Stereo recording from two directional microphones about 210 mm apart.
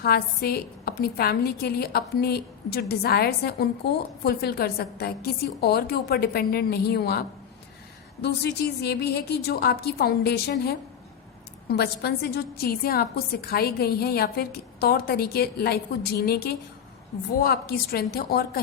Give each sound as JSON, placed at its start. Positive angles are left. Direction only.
{"t": 0.0, "sound": "a woman's voice", "side_deg": 45}